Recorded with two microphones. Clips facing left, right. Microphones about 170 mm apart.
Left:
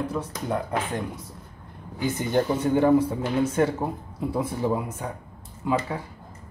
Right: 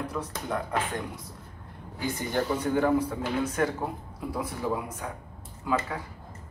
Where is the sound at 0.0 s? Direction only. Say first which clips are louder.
Left 4 dB; 30° left (ahead or behind).